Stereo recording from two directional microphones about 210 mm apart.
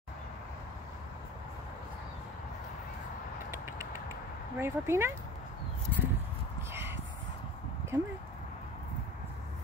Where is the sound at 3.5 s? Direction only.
15° right (ahead or behind).